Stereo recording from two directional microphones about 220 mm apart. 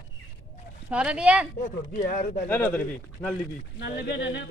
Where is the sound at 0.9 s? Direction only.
5° right (ahead or behind).